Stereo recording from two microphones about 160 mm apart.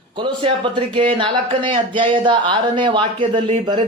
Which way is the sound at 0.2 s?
30° right (ahead or behind).